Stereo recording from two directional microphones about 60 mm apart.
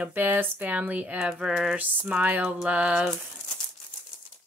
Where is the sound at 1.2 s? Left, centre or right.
Centre.